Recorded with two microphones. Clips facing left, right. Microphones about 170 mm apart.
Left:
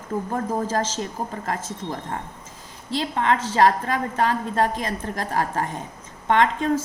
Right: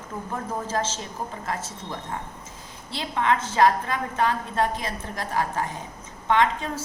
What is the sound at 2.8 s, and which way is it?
A woman's voice, 40° left (ahead or behind).